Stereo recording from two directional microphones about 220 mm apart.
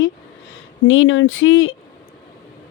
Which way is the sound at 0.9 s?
65° left (ahead or behind).